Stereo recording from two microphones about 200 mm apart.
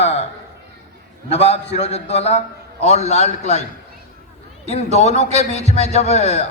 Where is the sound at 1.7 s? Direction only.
30° left (ahead or behind).